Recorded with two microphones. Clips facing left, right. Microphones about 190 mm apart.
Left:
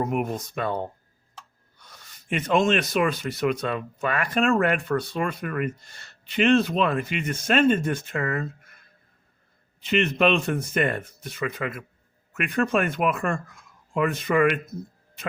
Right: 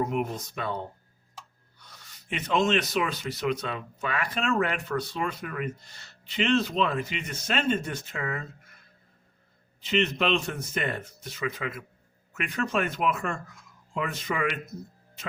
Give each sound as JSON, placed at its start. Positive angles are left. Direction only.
{"t": 0.0, "sound": "speech", "side_deg": 50}
{"t": 2.3, "sound": "speech", "side_deg": 50}
{"t": 9.8, "sound": "speech", "side_deg": 55}